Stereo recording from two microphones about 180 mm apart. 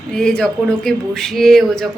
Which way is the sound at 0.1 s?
5° left (ahead or behind).